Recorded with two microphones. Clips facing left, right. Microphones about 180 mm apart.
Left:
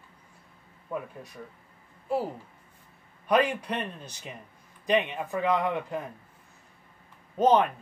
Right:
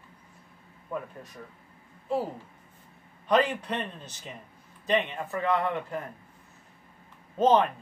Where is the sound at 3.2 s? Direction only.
10° left (ahead or behind).